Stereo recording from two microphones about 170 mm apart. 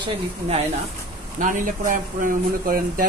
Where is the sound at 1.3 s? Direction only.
50° right (ahead or behind).